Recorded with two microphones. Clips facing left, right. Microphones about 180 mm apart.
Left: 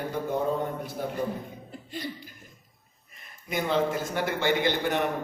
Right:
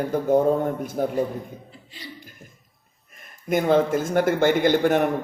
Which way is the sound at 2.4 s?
45° right (ahead or behind).